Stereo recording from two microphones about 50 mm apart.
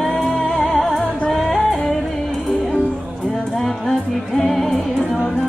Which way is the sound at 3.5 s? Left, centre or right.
Centre.